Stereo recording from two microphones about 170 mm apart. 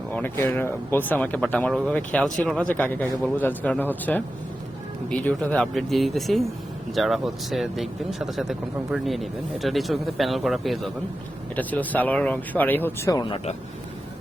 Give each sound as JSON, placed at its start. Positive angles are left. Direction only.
{"t": 0.1, "sound": "speech", "side_deg": 10}
{"t": 13.1, "sound": "speech", "side_deg": 30}